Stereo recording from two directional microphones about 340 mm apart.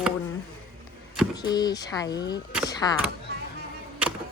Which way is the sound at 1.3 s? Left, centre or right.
Centre.